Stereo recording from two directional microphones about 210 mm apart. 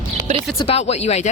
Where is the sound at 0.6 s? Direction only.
30° left (ahead or behind).